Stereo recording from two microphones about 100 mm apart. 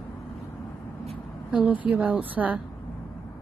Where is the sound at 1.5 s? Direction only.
15° right (ahead or behind).